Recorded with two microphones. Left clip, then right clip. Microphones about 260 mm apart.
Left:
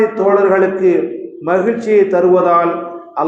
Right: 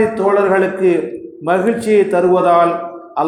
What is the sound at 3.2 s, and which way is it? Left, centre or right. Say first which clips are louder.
Music: even; right.